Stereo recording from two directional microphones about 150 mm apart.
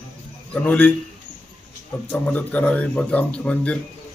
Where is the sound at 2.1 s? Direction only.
10° left (ahead or behind).